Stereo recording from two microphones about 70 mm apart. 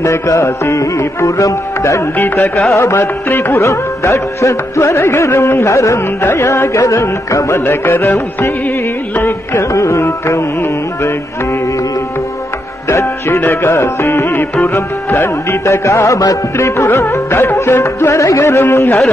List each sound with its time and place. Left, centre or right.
0.0 s music: left
2.1 s music: left
2.7 s music: left
3.6 s music: left
7.6 s music: left
9.1 s carnatic music: left
9.6 s music: left
12.8 s music: left
16.5 s music: left